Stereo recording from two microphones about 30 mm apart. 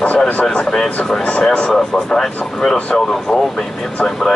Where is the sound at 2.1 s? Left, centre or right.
Centre.